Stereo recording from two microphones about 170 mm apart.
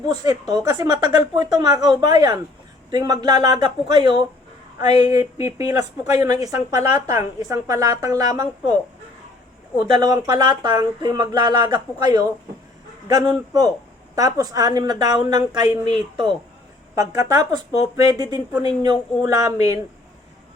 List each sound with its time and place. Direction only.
0.1 s a woman's voice: 20° right (ahead or behind)
9.8 s a woman's voice: 20° right (ahead or behind)